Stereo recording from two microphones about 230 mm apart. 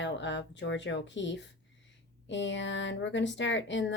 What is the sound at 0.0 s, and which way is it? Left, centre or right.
Speech, left.